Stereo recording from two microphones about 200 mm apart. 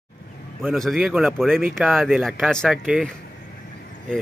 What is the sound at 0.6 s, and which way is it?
Speech, centre (ahead or behind).